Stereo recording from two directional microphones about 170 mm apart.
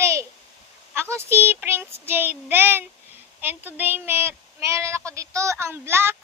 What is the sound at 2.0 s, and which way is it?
A woman's voice, 10° right (ahead or behind).